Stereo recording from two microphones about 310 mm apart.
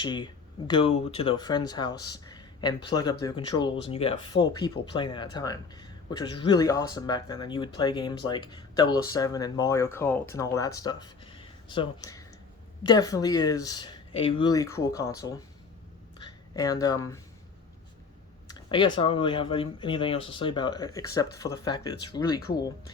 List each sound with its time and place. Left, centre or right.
0.0 s speech: centre
18.4 s a sound: centre
18.9 s speech: centre